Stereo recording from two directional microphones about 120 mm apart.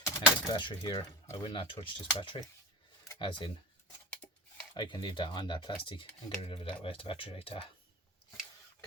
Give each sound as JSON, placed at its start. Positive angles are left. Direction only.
{"t": 0.0, "sound": "keys jangling", "side_deg": 30}
{"t": 0.6, "sound": "speech", "side_deg": 35}
{"t": 4.2, "sound": "a sound", "side_deg": 30}
{"t": 4.7, "sound": "speech", "side_deg": 40}